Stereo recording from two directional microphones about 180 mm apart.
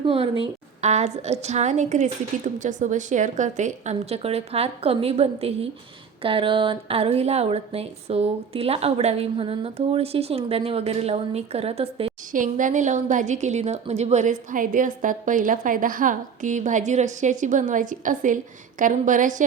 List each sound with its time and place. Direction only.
0.0 s speech: 30° right (ahead or behind)
12.3 s a woman's voice: 45° right (ahead or behind)